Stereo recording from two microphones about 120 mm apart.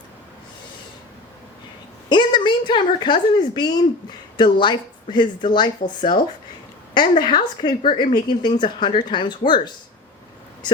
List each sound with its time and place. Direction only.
2.0 s speech: 40° left (ahead or behind)
7.2 s speech: 40° left (ahead or behind)